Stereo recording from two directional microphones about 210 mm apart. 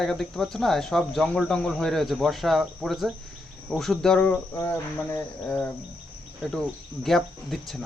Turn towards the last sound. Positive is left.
turn(degrees=0)  # may be behind; listen again after turning